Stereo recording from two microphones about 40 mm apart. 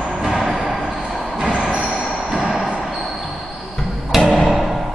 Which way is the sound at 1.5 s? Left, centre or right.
Right.